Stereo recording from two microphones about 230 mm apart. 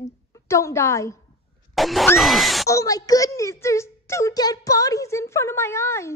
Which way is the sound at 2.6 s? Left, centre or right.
Centre.